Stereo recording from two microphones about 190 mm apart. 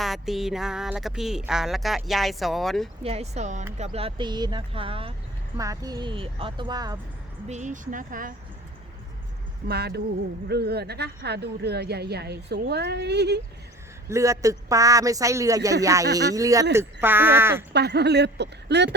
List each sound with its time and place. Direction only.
0.0 s speech: centre (ahead or behind)
3.0 s speech: 35° right (ahead or behind)
5.5 s speech: 15° right (ahead or behind)
7.4 s speech: 40° right (ahead or behind)
9.6 s speech: 60° right (ahead or behind)
14.1 s speech: 15° right (ahead or behind)
17.7 s speech: 60° right (ahead or behind)